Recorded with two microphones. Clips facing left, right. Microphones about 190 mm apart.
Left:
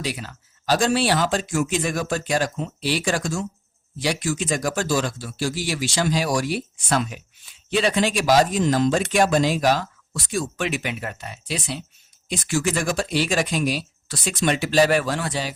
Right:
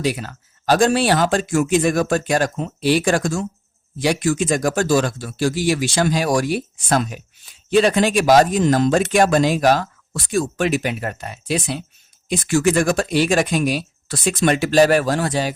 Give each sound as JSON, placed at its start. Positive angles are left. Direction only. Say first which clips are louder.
{"t": 0.0, "sound": "speech", "louder": "right 7 dB", "side_deg": -50}